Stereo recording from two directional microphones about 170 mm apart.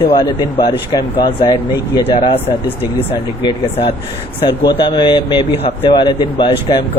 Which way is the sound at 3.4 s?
35° left (ahead or behind).